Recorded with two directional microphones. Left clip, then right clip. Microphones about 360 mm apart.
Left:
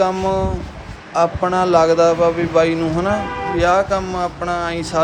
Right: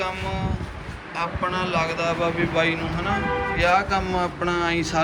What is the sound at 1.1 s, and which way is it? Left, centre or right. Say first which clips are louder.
Speech: left 9 dB; centre.